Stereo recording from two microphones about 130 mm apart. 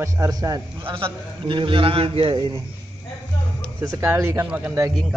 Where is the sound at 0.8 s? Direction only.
40° right (ahead or behind).